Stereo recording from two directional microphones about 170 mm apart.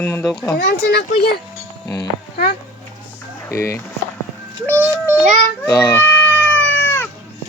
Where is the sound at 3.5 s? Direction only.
15° left (ahead or behind).